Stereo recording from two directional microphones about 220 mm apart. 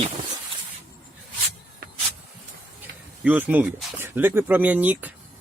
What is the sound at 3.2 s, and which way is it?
Speech, 5° right (ahead or behind).